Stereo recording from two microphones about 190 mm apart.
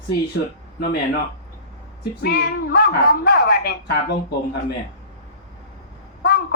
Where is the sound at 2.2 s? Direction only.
55° left (ahead or behind).